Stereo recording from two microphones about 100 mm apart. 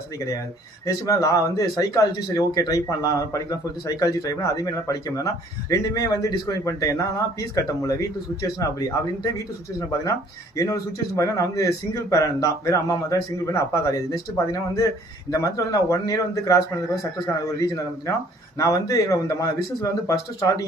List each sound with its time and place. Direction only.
0.9 s speech: 35° left (ahead or behind)
10.6 s speech: 35° left (ahead or behind)
17.6 s speech: 35° left (ahead or behind)